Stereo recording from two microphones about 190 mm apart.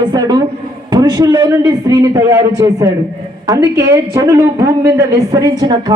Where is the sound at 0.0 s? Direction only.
20° right (ahead or behind).